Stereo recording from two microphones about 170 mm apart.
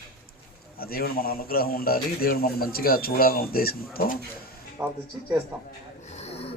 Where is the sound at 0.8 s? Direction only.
60° left (ahead or behind).